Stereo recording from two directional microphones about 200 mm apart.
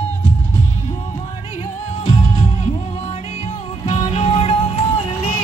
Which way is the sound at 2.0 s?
40° left (ahead or behind).